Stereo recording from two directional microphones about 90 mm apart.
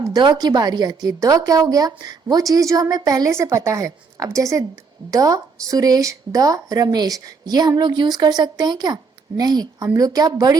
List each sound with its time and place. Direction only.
0.1 s a woman's voice: 50° right (ahead or behind)